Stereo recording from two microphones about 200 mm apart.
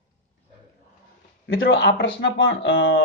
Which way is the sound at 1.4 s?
50° left (ahead or behind).